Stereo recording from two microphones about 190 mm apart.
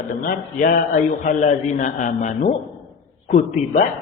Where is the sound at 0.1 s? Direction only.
50° left (ahead or behind).